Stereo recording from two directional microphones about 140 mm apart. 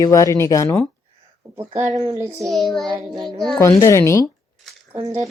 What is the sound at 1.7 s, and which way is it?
Speech, 60° right (ahead or behind).